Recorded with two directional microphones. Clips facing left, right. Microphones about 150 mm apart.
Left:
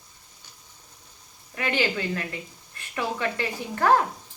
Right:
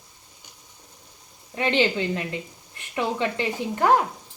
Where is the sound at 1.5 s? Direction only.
25° right (ahead or behind).